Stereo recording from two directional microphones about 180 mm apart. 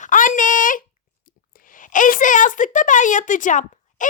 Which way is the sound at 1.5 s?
50° left (ahead or behind).